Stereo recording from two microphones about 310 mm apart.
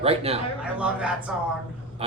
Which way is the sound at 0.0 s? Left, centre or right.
Centre.